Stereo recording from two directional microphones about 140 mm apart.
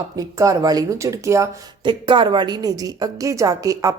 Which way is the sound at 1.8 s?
35° right (ahead or behind).